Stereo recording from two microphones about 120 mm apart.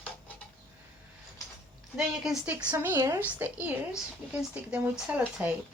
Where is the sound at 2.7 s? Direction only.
20° right (ahead or behind).